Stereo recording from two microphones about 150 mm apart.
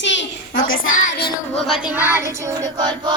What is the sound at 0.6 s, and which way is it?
Child singing, 80° left.